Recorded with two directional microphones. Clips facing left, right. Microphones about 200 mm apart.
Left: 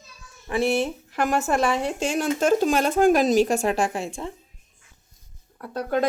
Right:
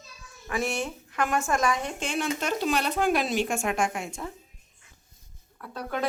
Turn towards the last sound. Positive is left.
turn(degrees=45)  # may be behind; listen again after turning